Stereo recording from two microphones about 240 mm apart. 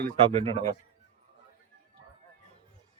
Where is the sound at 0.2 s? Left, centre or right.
Right.